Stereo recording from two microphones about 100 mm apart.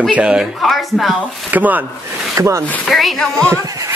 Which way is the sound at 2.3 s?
30° right (ahead or behind).